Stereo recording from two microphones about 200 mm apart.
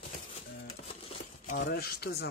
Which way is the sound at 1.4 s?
45° left (ahead or behind).